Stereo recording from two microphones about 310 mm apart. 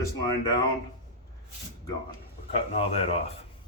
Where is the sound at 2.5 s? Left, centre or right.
Centre.